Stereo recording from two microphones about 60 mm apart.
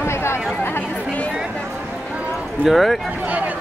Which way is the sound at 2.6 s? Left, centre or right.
Centre.